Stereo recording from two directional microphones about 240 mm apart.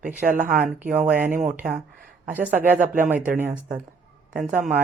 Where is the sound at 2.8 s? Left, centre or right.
Right.